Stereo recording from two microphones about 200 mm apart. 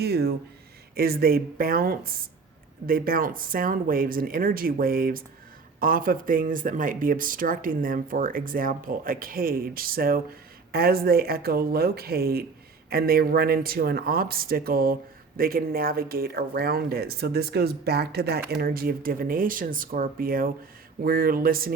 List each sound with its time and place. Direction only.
0.0 s speech: 55° right (ahead or behind)